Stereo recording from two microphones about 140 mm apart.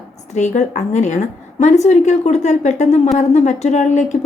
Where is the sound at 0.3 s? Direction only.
55° left (ahead or behind).